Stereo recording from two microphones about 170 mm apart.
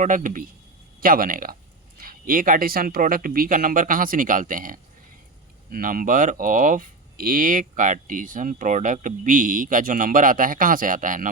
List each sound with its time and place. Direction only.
0.0 s speech: 50° right (ahead or behind)